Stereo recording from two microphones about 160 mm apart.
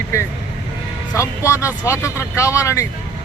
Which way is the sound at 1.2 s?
20° left (ahead or behind).